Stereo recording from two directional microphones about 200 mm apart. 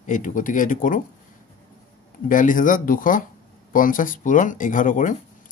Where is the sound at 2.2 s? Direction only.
40° left (ahead or behind).